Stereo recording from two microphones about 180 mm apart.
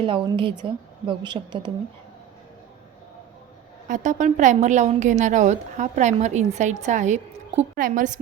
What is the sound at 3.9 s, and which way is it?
A woman's voice, 45° right (ahead or behind).